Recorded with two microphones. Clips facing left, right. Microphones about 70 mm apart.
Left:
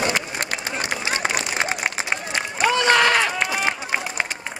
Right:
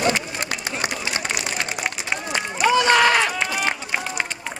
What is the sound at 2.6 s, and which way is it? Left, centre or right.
Run, centre.